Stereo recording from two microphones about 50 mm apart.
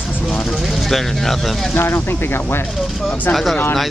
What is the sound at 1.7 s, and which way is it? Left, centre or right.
Speech, left.